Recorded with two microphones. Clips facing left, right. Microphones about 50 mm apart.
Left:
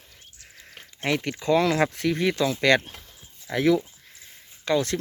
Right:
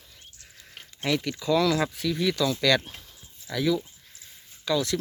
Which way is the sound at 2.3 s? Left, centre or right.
Left.